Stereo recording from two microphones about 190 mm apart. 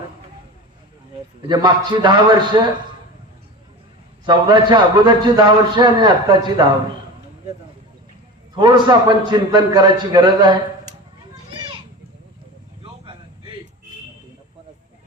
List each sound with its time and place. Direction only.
1.4 s a man's voice: 25° right (ahead or behind)
4.3 s a man's voice: 25° right (ahead or behind)
8.5 s a man's voice: 25° right (ahead or behind)